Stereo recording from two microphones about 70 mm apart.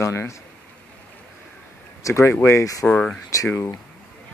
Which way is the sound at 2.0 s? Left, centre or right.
Left.